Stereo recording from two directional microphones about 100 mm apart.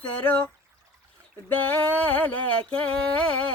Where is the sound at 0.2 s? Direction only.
15° left (ahead or behind).